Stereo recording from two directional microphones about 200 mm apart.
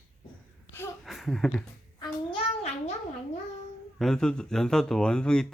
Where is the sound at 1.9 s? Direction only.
25° left (ahead or behind).